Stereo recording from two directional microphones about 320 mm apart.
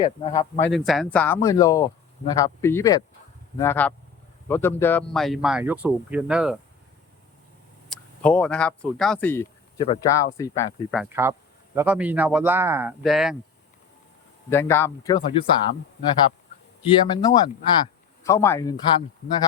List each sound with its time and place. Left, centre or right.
0.0 s speech: left
0.6 s speech: centre
7.9 s speech: centre
11.0 s speech: centre
14.5 s speech: centre
16.8 s speech: centre